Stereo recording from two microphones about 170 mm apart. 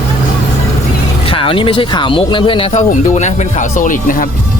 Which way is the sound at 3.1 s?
45° left (ahead or behind).